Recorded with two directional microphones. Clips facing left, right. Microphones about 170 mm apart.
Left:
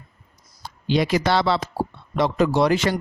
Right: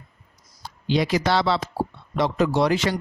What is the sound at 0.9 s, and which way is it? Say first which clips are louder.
A woman's voice: left 1 dB; 55° left (ahead or behind).